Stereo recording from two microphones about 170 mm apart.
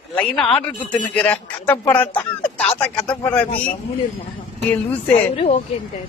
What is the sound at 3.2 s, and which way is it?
Speech, 10° left (ahead or behind).